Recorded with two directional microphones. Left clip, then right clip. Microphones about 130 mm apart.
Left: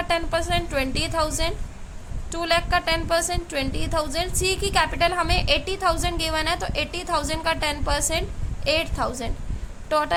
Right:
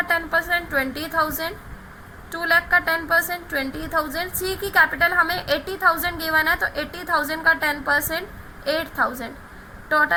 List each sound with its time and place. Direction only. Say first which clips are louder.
0.1 s a woman's voice: even; 25° left (ahead or behind)